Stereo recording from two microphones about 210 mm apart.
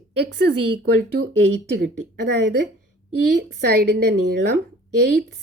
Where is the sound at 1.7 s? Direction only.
55° right (ahead or behind).